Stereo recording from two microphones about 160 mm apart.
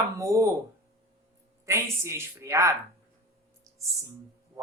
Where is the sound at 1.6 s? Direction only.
15° right (ahead or behind).